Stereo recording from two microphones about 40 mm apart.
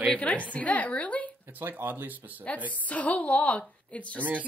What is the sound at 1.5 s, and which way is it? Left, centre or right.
Speech, right.